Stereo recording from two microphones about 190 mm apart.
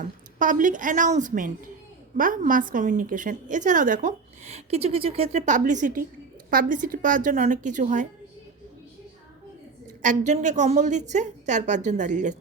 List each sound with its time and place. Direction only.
0.0 s a woman's voice: 45° right (ahead or behind)
10.0 s a woman's voice: 40° right (ahead or behind)